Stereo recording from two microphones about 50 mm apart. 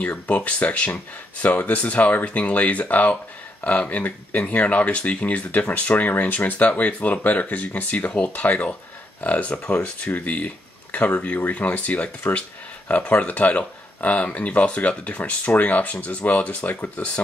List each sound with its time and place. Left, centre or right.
0.3 s speech: left